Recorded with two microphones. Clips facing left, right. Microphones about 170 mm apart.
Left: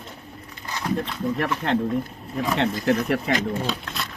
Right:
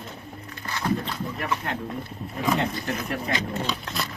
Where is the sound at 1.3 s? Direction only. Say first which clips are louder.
Left 6 dB; 75° left (ahead or behind).